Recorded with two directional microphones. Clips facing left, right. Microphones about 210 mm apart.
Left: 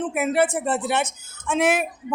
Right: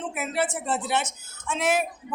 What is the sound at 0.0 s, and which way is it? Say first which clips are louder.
Speech: left 7 dB; 55° left (ahead or behind).